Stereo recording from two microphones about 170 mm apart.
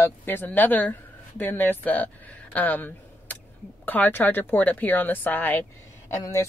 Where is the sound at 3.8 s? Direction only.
10° left (ahead or behind).